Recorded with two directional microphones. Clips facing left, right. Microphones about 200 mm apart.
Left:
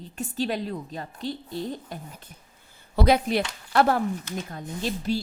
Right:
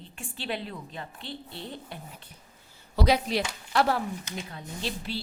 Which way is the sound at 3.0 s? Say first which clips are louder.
Left 4 dB; 55° left (ahead or behind).